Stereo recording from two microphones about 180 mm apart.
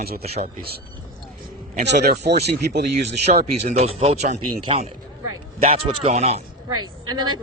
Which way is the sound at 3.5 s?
35° right (ahead or behind).